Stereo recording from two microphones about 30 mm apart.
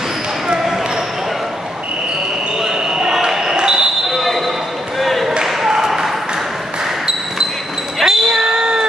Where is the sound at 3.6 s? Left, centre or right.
Right.